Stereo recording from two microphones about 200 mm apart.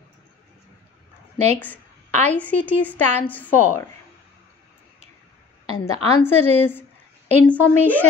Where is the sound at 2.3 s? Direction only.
5° left (ahead or behind).